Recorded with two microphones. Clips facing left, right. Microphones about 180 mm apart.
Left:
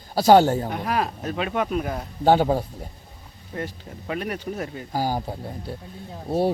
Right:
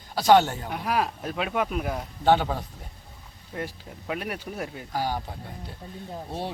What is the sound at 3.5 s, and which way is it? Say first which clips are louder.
Speech: left 2 dB; 5° right (ahead or behind).